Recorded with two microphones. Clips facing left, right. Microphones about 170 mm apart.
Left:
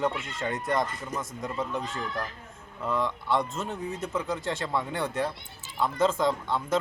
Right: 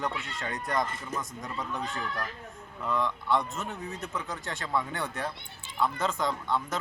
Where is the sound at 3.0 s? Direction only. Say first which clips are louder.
Left 1 dB; 25° left (ahead or behind).